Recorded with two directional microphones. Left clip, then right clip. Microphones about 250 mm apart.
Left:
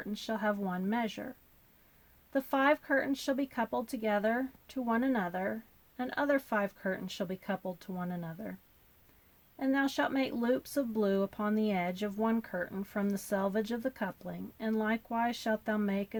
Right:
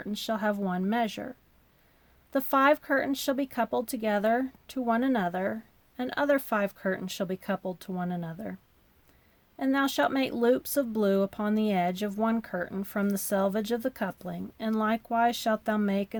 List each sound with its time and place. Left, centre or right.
0.0 s speech: right
2.3 s speech: right
9.6 s speech: right